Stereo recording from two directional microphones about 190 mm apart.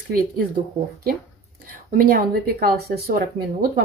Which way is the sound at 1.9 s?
50° right (ahead or behind).